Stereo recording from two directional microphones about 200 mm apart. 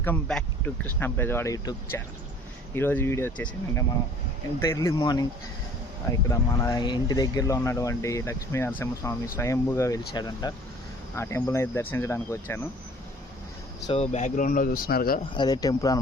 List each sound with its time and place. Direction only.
0.0 s speech: 5° left (ahead or behind)
13.8 s speech: 30° left (ahead or behind); by 15.2 s 50° left (ahead or behind)
15.4 s speech: 20° left (ahead or behind)